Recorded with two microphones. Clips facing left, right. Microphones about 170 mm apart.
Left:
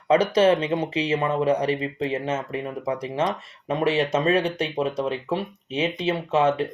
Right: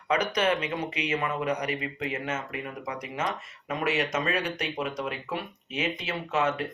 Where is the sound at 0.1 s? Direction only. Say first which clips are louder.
Left 8 dB; 30° left (ahead or behind).